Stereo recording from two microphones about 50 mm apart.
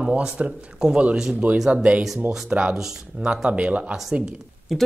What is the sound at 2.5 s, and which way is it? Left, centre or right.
Speech, right.